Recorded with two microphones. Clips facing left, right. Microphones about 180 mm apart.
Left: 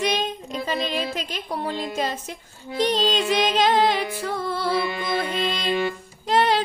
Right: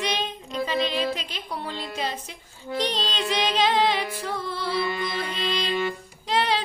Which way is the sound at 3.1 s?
45° left (ahead or behind).